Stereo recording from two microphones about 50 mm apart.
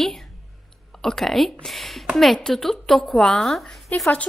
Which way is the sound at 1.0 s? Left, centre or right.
Centre.